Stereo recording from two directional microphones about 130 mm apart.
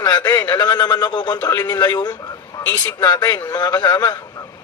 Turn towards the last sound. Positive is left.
turn(degrees=30)  # may be behind; listen again after turning